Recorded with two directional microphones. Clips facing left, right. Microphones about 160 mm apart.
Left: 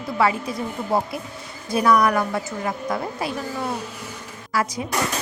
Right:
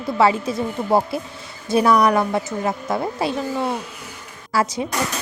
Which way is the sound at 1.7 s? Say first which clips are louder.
Right 2 dB; 25° right (ahead or behind).